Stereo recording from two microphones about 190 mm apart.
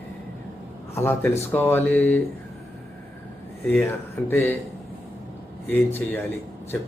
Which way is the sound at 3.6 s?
10° left (ahead or behind).